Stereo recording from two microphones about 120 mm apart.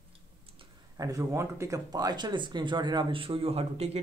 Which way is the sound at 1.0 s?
25° right (ahead or behind).